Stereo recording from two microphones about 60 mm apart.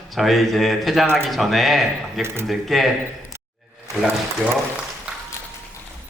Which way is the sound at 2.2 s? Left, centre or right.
Right.